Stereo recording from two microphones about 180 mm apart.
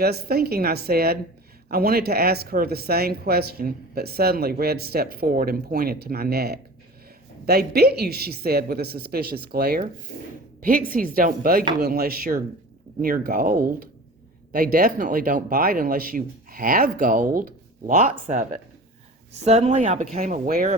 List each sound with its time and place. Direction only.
0.0 s speech: 60° right (ahead or behind); by 20.2 s 40° right (ahead or behind)
20.2 s speech: 50° right (ahead or behind)